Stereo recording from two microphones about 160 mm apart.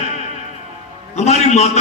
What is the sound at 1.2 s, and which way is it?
Speech, 45° left (ahead or behind).